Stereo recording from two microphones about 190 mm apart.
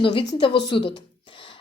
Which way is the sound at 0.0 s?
25° left (ahead or behind).